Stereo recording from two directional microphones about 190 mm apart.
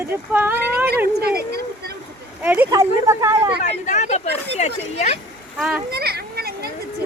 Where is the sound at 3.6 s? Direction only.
40° left (ahead or behind).